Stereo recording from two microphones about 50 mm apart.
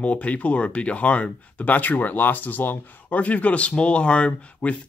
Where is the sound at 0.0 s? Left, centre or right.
Left.